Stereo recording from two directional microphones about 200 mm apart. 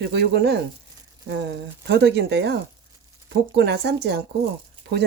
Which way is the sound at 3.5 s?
55° right (ahead or behind).